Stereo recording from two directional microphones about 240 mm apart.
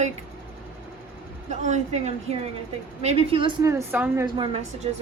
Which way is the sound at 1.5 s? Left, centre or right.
Right.